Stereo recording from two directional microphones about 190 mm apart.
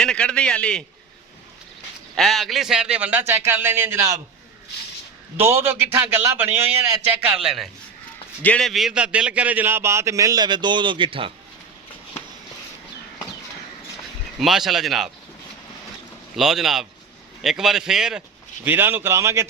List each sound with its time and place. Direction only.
0.0 s a man's voice: 5° left (ahead or behind)
2.1 s a man's voice: centre (ahead or behind)
5.4 s a man's voice: 10° right (ahead or behind)
7.3 s a man's voice: centre (ahead or behind); by 11.3 s 25° right (ahead or behind)
14.3 s a man's voice: centre (ahead or behind)
16.3 s a man's voice: centre (ahead or behind)